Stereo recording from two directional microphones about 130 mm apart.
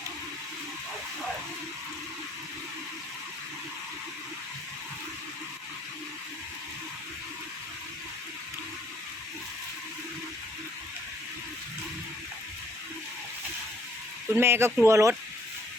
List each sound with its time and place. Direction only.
14.3 s speech: 20° right (ahead or behind)